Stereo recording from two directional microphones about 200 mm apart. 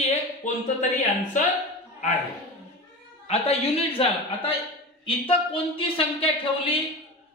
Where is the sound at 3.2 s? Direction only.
30° left (ahead or behind).